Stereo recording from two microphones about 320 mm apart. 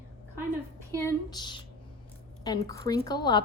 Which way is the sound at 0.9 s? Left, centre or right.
Centre.